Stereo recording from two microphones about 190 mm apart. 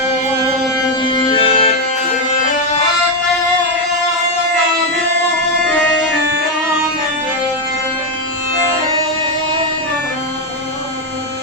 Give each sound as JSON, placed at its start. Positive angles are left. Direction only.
{"t": 1.1, "sound": "music", "side_deg": 25}